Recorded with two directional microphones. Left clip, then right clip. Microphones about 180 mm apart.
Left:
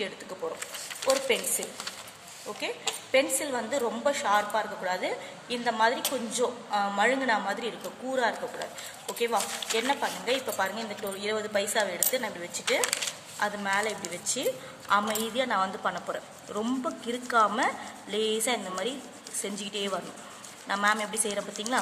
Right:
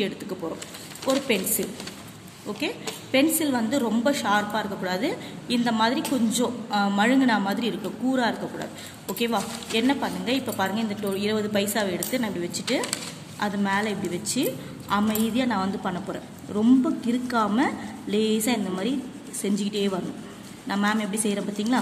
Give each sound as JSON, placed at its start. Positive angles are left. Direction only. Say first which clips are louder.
{"t": 1.0, "sound": "a woman's voice", "louder": "right 2 dB", "side_deg": 5}
{"t": 2.6, "sound": "a woman's voice", "louder": "right 2 dB", "side_deg": 10}